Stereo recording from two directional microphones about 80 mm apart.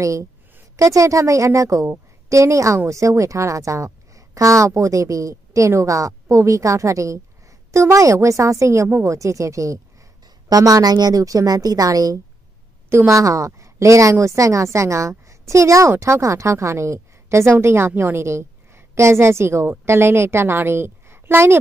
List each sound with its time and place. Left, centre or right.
0.0 s a woman's voice: right
10.5 s a woman's voice: right
12.9 s a woman's voice: right